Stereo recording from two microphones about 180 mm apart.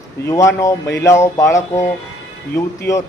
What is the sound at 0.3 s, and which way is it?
A man's voice, 15° left (ahead or behind).